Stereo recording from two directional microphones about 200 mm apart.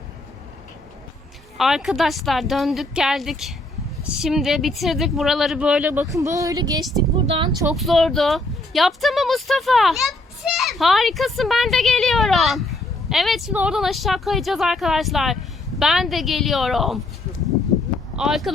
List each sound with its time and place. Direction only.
1.5 s speech: centre (ahead or behind); by 7.7 s 20° right (ahead or behind)
7.7 s speech: centre (ahead or behind)
18.2 s speech: centre (ahead or behind)